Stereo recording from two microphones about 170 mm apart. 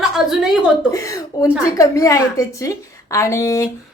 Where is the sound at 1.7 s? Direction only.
20° left (ahead or behind).